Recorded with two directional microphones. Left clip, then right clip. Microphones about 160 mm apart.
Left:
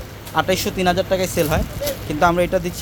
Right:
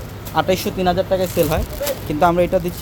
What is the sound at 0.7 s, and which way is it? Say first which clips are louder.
Speech: even; 10° left (ahead or behind).